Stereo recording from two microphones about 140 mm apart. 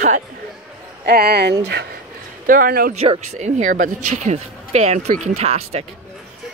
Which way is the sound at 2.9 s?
50° right (ahead or behind).